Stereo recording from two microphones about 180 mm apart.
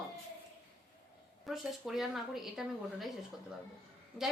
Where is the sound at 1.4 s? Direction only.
Centre (ahead or behind).